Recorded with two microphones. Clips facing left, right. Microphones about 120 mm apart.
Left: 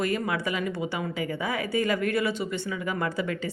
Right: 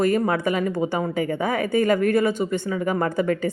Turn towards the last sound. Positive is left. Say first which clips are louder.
# right 7 dB
turn(degrees=-45)  # may be behind; listen again after turning